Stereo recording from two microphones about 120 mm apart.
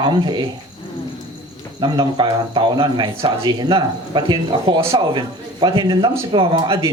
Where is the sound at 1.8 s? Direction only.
40° right (ahead or behind).